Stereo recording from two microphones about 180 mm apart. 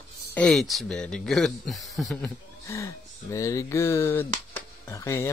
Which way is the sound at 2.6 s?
15° left (ahead or behind).